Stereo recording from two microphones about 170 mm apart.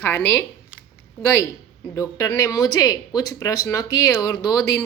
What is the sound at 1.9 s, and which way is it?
Speech, 20° left (ahead or behind).